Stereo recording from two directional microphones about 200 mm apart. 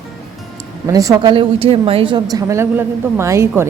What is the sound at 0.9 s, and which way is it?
A woman's voice, 15° right (ahead or behind).